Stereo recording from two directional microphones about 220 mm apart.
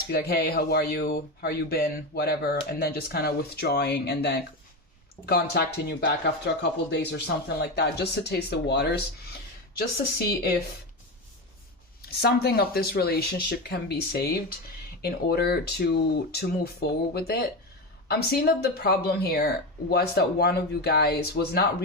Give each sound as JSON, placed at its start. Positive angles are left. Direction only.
{"t": 0.1, "sound": "speech", "side_deg": 45}
{"t": 12.2, "sound": "speech", "side_deg": 45}